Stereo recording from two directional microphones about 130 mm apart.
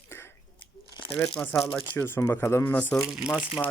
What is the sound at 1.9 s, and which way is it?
Speech, 15° left (ahead or behind).